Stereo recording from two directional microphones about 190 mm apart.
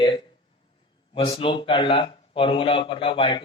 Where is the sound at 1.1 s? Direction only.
25° left (ahead or behind).